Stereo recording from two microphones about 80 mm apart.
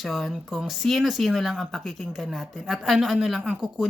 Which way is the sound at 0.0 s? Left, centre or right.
Centre.